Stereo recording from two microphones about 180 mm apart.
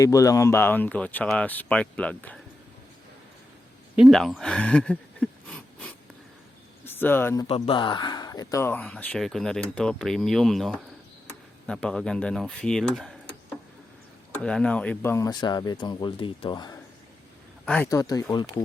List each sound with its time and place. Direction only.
0.0 s speech: 20° left (ahead or behind)
3.9 s speech: centre (ahead or behind)
7.4 s speech: 30° left (ahead or behind); by 13.1 s 5° left (ahead or behind)
14.3 s speech: 5° left (ahead or behind); by 16.7 s 25° left (ahead or behind)
17.7 s speech: 15° left (ahead or behind)